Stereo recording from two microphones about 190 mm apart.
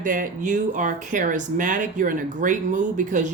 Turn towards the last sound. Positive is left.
turn(degrees=-40)  # may be behind; listen again after turning